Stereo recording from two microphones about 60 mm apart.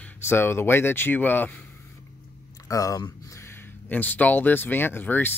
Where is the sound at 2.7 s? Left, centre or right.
Left.